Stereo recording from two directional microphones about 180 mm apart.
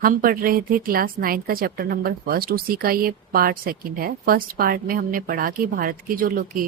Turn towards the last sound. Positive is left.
turn(degrees=-50)  # may be behind; listen again after turning